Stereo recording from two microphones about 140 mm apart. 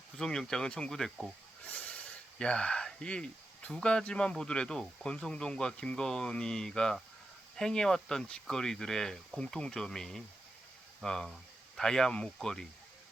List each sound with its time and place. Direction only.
0.2 s speech: 5° left (ahead or behind)